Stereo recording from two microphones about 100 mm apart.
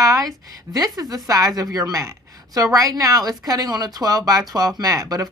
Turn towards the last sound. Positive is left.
turn(degrees=-40)  # may be behind; listen again after turning